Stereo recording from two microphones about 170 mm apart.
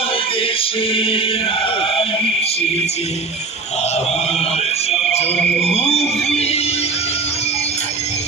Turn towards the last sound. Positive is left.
turn(degrees=35)  # may be behind; listen again after turning